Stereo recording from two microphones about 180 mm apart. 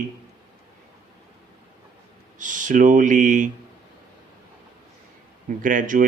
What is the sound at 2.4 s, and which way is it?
Speech, 45° right (ahead or behind).